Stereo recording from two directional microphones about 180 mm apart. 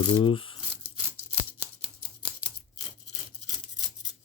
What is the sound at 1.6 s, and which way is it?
Scissors, 10° right (ahead or behind).